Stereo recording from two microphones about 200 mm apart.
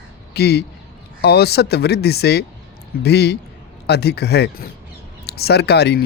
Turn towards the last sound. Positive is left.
turn(degrees=55)  # may be behind; listen again after turning